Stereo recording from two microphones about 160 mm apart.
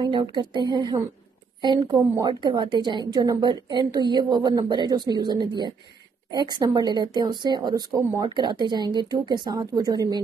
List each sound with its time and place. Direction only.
0.0 s a woman's voice: 30° right (ahead or behind)